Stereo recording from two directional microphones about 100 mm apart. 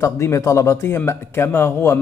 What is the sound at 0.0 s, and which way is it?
Speech, 30° left (ahead or behind).